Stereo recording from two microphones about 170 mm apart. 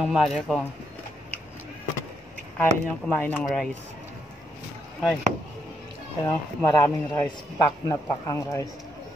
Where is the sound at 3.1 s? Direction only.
10° left (ahead or behind).